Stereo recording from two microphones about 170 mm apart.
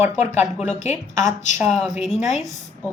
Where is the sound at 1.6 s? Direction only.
Centre (ahead or behind).